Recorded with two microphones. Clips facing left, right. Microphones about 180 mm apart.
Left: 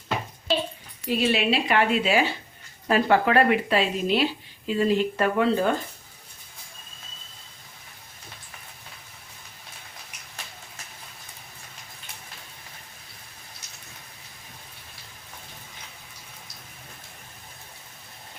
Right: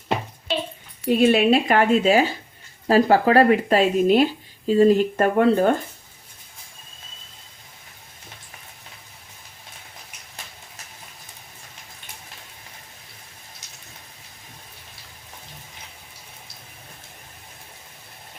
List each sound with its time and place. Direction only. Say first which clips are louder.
1.1 s speech: right 7 dB; 50° right (ahead or behind)